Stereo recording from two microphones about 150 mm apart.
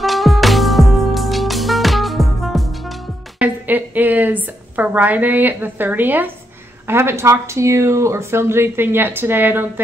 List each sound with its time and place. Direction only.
0.0 s music: centre (ahead or behind)
3.3 s a woman's voice: 10° right (ahead or behind)